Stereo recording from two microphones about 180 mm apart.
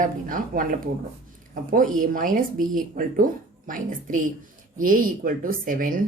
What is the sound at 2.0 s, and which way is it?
Speech, 50° right (ahead or behind).